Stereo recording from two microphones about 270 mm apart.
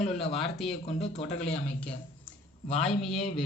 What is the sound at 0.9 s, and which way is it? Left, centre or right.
Speech, left.